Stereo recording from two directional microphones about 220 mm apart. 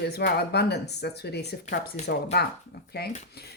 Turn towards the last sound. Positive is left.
turn(degrees=45)  # may be behind; listen again after turning